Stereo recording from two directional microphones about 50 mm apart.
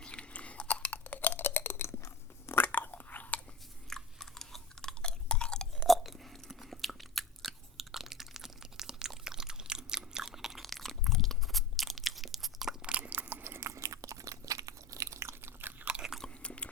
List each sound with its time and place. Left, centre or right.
0.0 s chewing: left
2.6 s biting: left
3.8 s chewing: centre
5.0 s chewing: centre
5.7 s biting: centre
10.6 s crunch: centre
12.8 s biting: right
13.1 s biting: right
13.4 s biting: right
13.7 s biting: right
15.4 s biting: right
16.3 s a sound: left